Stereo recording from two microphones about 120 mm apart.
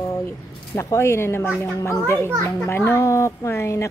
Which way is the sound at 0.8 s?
25° left (ahead or behind).